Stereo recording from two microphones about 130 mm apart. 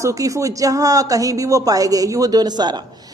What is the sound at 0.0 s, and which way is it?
A woman's voice, 25° right (ahead or behind).